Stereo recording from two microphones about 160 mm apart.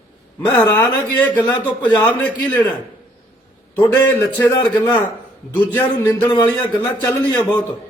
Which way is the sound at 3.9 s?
10° left (ahead or behind).